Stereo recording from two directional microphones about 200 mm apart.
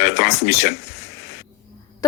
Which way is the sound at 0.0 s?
55° left (ahead or behind).